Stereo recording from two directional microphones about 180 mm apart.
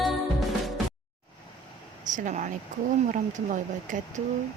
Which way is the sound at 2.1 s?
45° right (ahead or behind).